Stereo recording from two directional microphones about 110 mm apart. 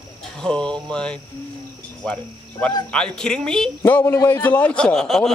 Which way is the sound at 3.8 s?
20° left (ahead or behind).